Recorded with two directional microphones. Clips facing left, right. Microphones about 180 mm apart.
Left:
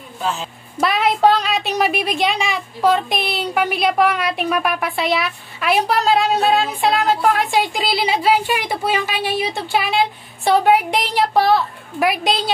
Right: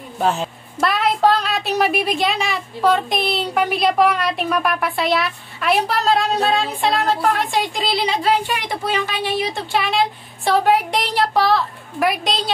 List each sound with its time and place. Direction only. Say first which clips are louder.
0.2 s a woman's voice: right 4 dB; 55° right (ahead or behind)
0.7 s a woman's voice: left 1 dB; centre (ahead or behind)